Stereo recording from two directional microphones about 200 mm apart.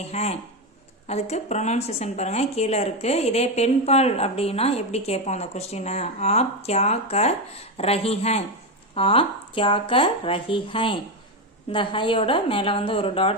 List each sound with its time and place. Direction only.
0.1 s a woman's voice: 30° left (ahead or behind)